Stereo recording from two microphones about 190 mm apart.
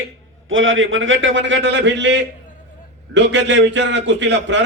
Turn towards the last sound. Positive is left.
turn(degrees=-70)  # may be behind; listen again after turning